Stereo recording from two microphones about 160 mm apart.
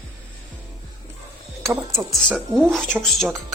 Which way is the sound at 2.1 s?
Centre (ahead or behind).